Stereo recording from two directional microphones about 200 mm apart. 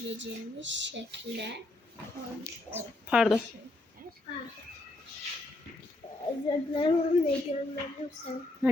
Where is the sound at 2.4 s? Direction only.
10° right (ahead or behind).